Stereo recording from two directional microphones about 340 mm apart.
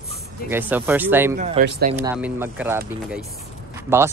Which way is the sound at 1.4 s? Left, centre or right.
Right.